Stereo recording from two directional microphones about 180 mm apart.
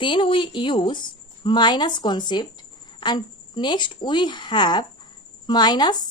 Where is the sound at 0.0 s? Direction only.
30° left (ahead or behind).